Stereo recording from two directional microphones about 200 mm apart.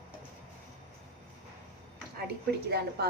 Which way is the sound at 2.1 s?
55° right (ahead or behind).